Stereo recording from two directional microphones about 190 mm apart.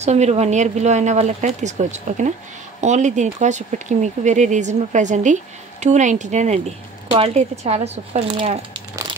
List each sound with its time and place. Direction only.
0.0 s speech: 35° right (ahead or behind)